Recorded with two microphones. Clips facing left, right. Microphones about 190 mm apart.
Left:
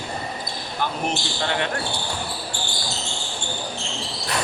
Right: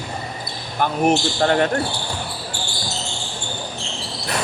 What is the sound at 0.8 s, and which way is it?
Speech, 50° right (ahead or behind).